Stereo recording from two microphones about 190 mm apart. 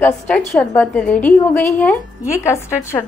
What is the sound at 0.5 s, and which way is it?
Speech, 5° left (ahead or behind).